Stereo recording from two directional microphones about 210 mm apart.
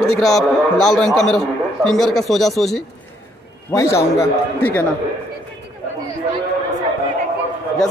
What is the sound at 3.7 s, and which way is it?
A man's voice, 15° left (ahead or behind).